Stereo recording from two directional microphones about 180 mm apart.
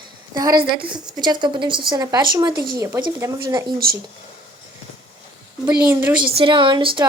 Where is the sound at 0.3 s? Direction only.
20° right (ahead or behind).